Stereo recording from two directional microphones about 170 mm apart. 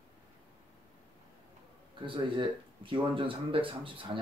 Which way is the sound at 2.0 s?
30° right (ahead or behind).